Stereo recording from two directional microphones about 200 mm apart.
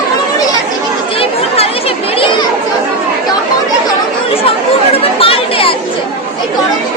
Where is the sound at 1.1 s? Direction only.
30° left (ahead or behind).